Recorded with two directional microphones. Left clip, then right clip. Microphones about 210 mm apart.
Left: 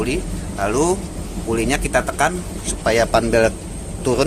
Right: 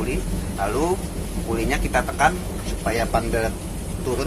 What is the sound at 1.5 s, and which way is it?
Speech, 50° left (ahead or behind).